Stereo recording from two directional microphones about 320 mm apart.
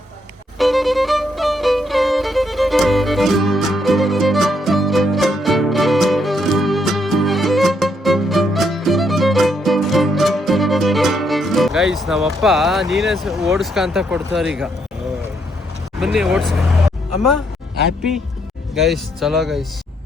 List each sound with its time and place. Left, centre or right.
0.6 s violin: centre
16.0 s speech: centre
18.7 s speech: centre